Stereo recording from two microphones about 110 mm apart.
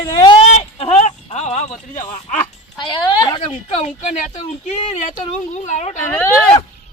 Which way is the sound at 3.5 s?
90° left.